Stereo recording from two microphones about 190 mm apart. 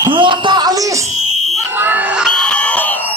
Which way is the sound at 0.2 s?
25° right (ahead or behind).